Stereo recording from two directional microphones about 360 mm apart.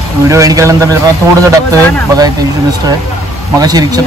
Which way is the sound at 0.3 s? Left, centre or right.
Centre.